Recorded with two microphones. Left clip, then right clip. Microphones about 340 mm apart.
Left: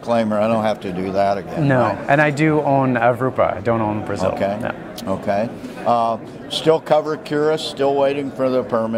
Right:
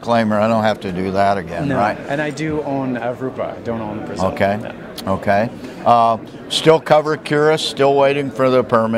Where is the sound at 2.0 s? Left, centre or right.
Left.